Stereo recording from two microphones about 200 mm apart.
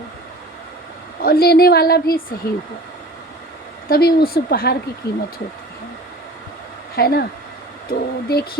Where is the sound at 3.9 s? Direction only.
50° left (ahead or behind).